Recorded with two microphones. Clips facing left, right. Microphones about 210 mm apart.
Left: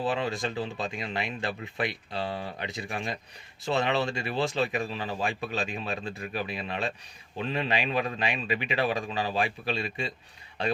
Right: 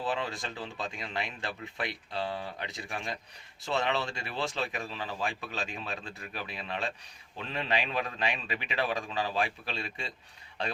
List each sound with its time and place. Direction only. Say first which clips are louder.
0.1 s a man's voice: left 5 dB; 15° left (ahead or behind)